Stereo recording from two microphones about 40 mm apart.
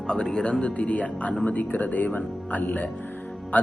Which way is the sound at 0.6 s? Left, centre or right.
Left.